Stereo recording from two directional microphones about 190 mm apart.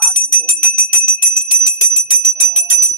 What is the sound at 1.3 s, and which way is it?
Jingle bell, 45° left (ahead or behind).